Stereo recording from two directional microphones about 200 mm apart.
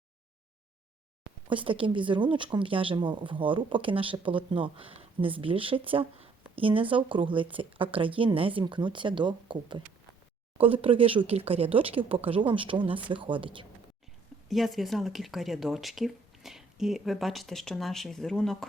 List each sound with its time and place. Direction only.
1.5 s a woman's voice: 25° right (ahead or behind)
14.4 s speech: centre (ahead or behind)